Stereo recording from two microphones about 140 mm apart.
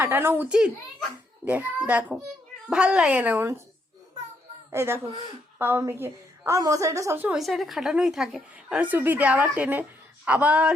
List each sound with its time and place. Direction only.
0.0 s speech: 15° right (ahead or behind)
4.7 s a woman's voice: 15° right (ahead or behind)
7.3 s a woman's voice: centre (ahead or behind)